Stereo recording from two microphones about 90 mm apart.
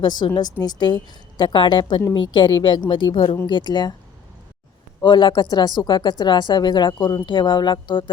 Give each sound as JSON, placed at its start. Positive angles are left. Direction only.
{"t": 0.0, "sound": "speech", "side_deg": 55}
{"t": 3.4, "sound": "speech", "side_deg": 55}
{"t": 5.0, "sound": "speech", "side_deg": 60}